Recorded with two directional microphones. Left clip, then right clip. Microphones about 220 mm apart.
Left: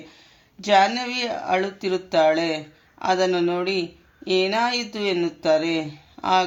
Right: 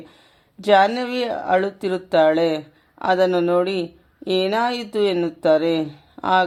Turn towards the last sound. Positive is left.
turn(degrees=-50)  # may be behind; listen again after turning